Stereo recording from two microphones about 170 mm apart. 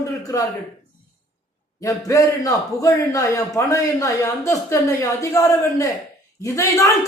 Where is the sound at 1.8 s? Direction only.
20° left (ahead or behind).